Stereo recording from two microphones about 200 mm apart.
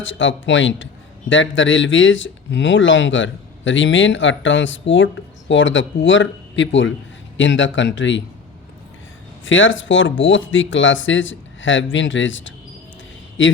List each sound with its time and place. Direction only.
0.0 s speech: 70° left (ahead or behind)
9.4 s speech: 75° left (ahead or behind)